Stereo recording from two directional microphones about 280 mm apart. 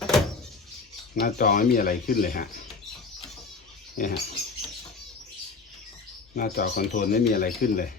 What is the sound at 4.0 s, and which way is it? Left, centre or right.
Speech, left.